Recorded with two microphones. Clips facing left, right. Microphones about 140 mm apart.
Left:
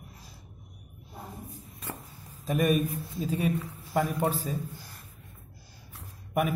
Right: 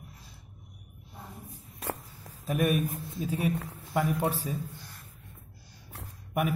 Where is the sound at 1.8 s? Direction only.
80° right.